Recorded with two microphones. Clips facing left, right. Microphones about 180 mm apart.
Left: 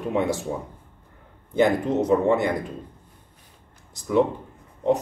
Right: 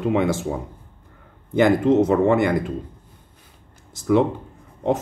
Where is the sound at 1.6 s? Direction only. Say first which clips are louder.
Right 4 dB; 80° right.